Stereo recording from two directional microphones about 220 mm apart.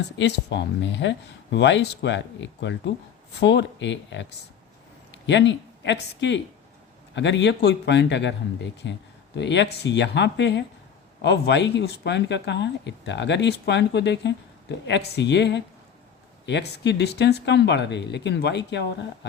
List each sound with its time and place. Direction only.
0.2 s speech: 55° left (ahead or behind)